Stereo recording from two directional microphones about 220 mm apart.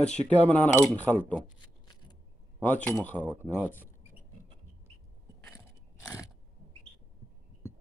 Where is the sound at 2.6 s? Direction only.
5° left (ahead or behind).